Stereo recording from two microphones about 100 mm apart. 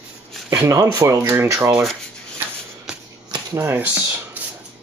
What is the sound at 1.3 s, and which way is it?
Speech, 25° right (ahead or behind).